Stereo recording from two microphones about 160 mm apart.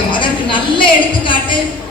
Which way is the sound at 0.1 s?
30° left (ahead or behind).